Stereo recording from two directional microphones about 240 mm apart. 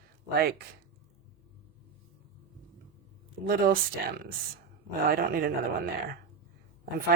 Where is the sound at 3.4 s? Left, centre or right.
Right.